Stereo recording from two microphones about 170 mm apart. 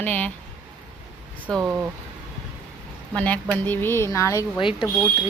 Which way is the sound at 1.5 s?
15° right (ahead or behind).